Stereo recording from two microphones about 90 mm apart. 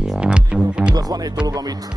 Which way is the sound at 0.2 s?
10° right (ahead or behind).